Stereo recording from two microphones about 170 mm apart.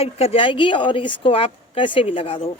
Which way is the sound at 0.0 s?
35° left (ahead or behind).